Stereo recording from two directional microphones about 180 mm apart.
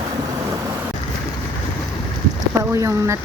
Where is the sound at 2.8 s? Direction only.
15° right (ahead or behind).